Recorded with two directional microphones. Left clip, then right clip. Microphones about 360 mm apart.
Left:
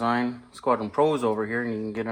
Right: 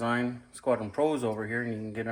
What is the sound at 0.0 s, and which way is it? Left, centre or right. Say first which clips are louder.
Speech: left 5 dB; left.